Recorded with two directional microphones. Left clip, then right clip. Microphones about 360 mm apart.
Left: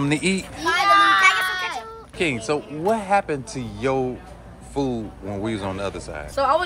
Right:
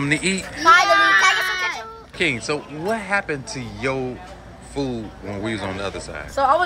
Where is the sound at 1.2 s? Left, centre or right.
Left.